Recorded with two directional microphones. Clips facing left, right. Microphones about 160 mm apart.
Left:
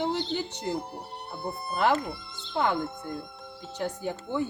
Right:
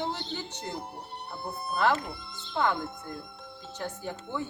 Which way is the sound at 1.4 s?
Centre (ahead or behind).